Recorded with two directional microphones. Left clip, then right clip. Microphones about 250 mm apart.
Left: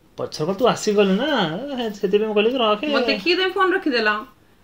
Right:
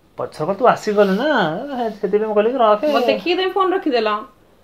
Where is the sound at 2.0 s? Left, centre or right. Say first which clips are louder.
Right 1 dB; centre.